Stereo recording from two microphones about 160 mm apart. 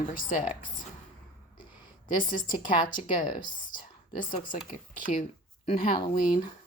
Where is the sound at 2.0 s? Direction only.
30° left (ahead or behind).